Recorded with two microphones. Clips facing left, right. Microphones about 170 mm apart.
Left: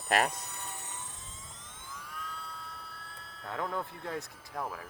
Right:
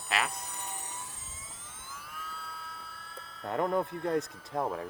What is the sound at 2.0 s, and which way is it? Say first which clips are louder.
Police car: left 1 dB; 5° right (ahead or behind).